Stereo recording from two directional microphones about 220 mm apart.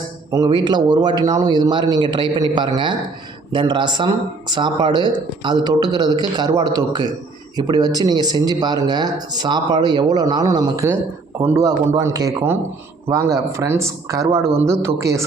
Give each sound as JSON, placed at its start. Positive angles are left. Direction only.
{"t": 0.3, "sound": "speech", "side_deg": -15}